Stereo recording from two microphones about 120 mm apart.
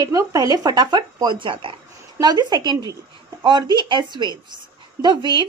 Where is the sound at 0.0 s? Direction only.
30° right (ahead or behind).